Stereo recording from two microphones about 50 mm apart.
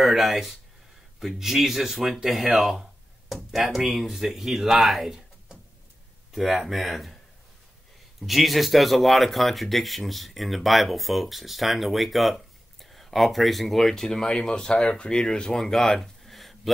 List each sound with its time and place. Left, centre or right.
0.0 s speech: centre
8.2 s speech: centre